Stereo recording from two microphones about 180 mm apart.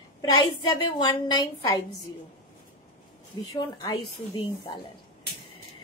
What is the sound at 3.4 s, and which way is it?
A woman's voice, 20° left (ahead or behind).